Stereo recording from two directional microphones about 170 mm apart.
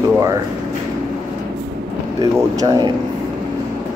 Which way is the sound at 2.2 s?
20° right (ahead or behind).